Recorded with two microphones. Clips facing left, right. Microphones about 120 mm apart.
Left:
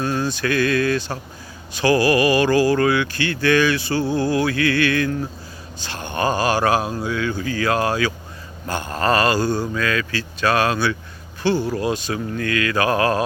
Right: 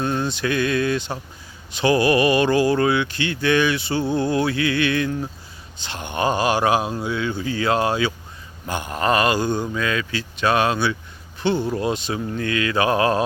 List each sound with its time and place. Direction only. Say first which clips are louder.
0.0 s speech: left 1 dB; 20° right (ahead or behind)